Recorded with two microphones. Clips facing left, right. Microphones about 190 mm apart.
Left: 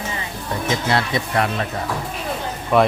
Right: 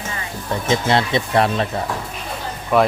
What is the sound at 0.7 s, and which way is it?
Speech, 25° right (ahead or behind).